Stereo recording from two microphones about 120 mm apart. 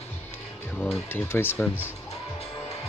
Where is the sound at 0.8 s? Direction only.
20° left (ahead or behind).